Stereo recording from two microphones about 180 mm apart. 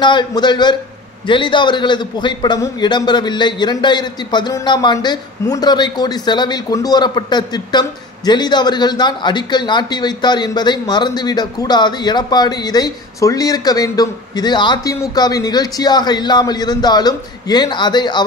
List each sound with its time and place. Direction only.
0.0 s a man's voice: 25° left (ahead or behind)